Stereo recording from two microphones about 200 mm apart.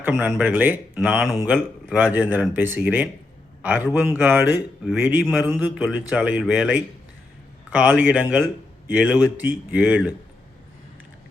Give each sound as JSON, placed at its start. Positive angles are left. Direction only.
{"t": 0.0, "sound": "speech", "side_deg": -5}